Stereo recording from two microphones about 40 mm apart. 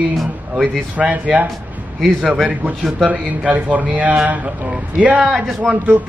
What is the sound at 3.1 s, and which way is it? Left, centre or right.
A man's voice, right.